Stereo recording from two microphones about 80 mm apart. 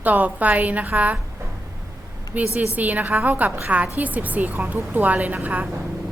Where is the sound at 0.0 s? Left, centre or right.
Centre.